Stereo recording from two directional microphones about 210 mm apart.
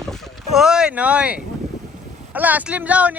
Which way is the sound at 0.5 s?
5° right (ahead or behind).